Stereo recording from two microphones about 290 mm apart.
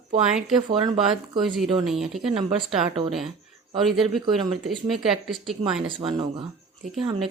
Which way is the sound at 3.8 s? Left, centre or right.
Centre.